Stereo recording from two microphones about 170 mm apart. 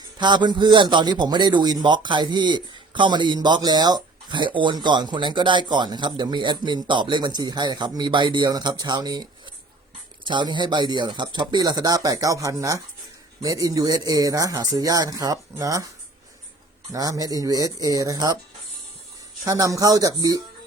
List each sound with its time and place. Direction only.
0.0 s a man's voice: 25° right (ahead or behind)
10.2 s a man's voice: 25° right (ahead or behind)
16.9 s a man's voice: 20° right (ahead or behind)
19.5 s a man's voice: 20° right (ahead or behind)